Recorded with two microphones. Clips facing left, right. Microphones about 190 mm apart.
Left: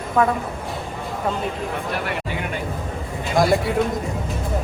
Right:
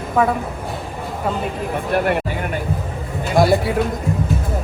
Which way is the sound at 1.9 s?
50° right (ahead or behind).